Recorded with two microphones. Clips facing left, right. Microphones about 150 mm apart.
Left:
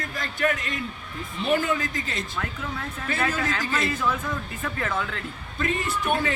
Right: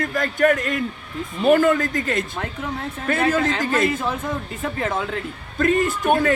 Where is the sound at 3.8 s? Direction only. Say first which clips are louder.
Right 3 dB; 25° right (ahead or behind).